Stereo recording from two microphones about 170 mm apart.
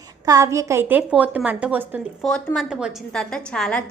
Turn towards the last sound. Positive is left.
turn(degrees=5)  # may be behind; listen again after turning